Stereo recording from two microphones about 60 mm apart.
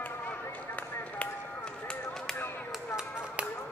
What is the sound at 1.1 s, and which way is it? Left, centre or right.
Finger snapping, centre.